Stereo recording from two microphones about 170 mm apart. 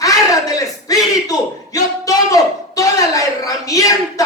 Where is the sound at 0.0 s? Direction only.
20° left (ahead or behind).